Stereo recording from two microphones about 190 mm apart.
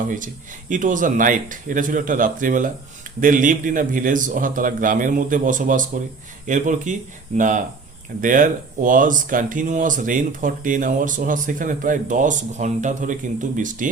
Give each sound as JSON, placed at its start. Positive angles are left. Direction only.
{"t": 0.7, "sound": "speech", "side_deg": -45}